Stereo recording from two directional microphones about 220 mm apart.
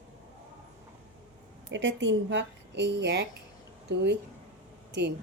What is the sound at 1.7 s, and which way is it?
A woman's voice, 55° right (ahead or behind).